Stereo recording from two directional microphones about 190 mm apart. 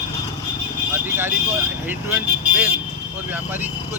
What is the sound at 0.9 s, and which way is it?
Speech, 10° right (ahead or behind).